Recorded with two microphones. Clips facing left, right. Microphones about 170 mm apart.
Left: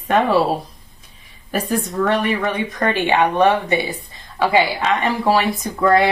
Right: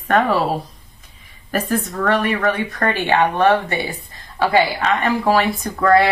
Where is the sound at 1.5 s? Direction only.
15° left (ahead or behind).